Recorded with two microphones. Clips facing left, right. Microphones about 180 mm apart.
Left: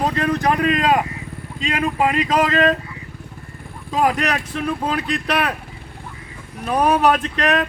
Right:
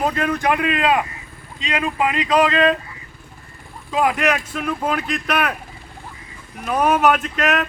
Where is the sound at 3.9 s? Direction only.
35° left (ahead or behind).